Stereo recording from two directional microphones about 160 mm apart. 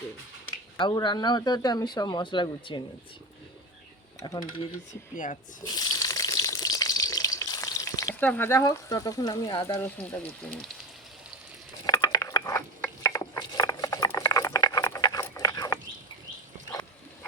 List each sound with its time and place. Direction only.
0.8 s speech: 30° left (ahead or behind)
4.2 s speech: 25° left (ahead or behind)
5.1 s speech: 55° left (ahead or behind)
5.6 s water tap: 25° left (ahead or behind)
8.2 s speech: 10° left (ahead or behind)
10.0 s speech: 10° left (ahead or behind)
11.9 s a sound: 20° left (ahead or behind)